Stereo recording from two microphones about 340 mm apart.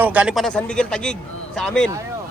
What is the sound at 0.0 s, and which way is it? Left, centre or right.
A man's voice, centre.